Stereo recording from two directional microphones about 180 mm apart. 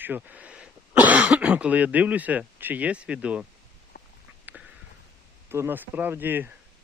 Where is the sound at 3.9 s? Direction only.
65° left (ahead or behind).